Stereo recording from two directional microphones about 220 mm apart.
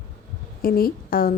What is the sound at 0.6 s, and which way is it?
Speech, 40° left (ahead or behind).